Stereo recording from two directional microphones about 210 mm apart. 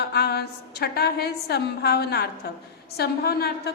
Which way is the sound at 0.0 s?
50° left (ahead or behind).